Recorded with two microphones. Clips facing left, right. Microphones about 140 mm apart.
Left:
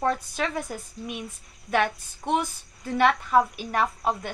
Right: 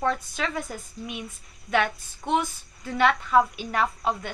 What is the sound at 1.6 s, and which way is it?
A woman's voice, 40° left (ahead or behind).